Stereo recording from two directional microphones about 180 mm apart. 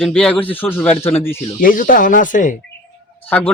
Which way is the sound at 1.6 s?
50° left (ahead or behind).